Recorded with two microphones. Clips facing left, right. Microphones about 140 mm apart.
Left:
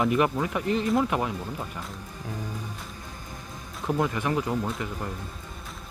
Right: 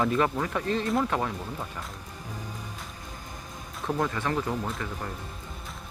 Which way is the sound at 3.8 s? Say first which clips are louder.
Left 2 dB; 5° left (ahead or behind).